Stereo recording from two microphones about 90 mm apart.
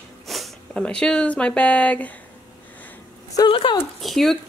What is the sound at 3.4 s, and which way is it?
Speech, 75° left (ahead or behind).